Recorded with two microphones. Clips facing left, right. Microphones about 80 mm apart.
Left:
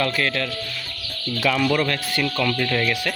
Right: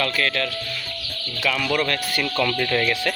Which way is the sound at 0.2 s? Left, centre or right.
Centre.